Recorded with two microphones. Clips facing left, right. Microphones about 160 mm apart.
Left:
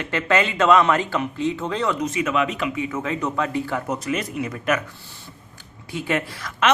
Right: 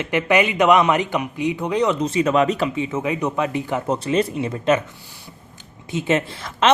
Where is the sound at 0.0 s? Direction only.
15° right (ahead or behind).